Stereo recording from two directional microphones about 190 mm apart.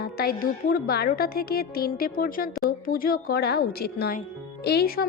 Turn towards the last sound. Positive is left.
turn(degrees=50)  # may be behind; listen again after turning